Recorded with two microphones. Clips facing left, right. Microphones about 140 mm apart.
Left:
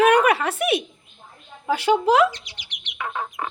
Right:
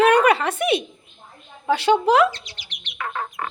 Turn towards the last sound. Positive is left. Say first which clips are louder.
# even
turn(degrees=15)  # may be behind; listen again after turning